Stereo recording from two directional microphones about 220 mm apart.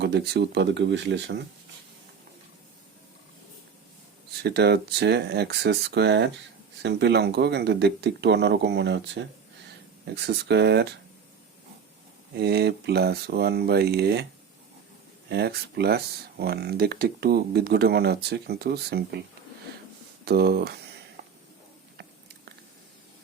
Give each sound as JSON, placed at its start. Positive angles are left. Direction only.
{"t": 0.0, "sound": "speech", "side_deg": -50}
{"t": 4.4, "sound": "speech", "side_deg": -50}
{"t": 12.3, "sound": "speech", "side_deg": -50}
{"t": 15.3, "sound": "speech", "side_deg": -50}
{"t": 20.2, "sound": "speech", "side_deg": -45}
{"t": 21.2, "sound": "a sound", "side_deg": -50}